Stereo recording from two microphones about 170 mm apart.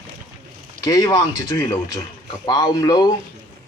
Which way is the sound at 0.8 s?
20° left (ahead or behind).